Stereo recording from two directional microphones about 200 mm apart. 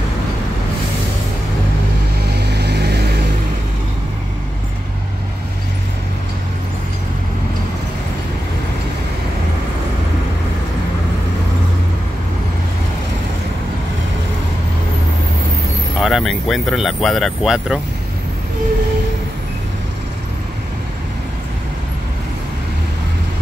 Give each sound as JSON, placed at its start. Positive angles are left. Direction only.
{"t": 2.3, "sound": "vehicle", "side_deg": -55}
{"t": 16.0, "sound": "speech", "side_deg": 0}